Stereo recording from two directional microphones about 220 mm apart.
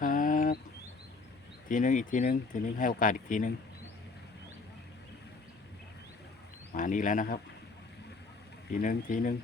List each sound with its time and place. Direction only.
0.0 s a sound: 35° left (ahead or behind)
1.6 s speech: 35° left (ahead or behind)
6.7 s speech: 35° left (ahead or behind)
8.8 s speech: 35° left (ahead or behind)